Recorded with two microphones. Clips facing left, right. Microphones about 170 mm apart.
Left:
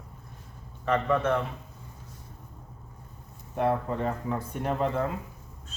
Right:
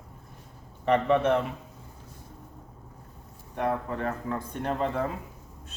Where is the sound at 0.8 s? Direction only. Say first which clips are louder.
Right 3 dB; 20° right (ahead or behind).